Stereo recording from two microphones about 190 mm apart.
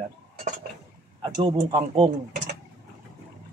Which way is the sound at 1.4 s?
30° right (ahead or behind).